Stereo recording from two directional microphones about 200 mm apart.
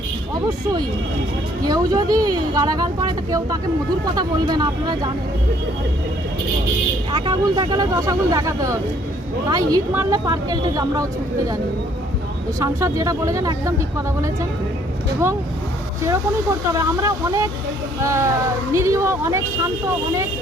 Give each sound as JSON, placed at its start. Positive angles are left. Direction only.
{"t": 1.6, "sound": "speech", "side_deg": -20}
{"t": 7.1, "sound": "speech", "side_deg": -20}
{"t": 12.5, "sound": "speech", "side_deg": -15}
{"t": 16.7, "sound": "speech", "side_deg": -15}